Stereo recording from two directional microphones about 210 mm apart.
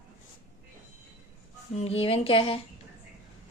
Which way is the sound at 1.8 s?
30° left (ahead or behind).